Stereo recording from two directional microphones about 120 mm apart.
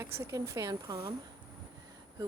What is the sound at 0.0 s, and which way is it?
Speech, 25° right (ahead or behind).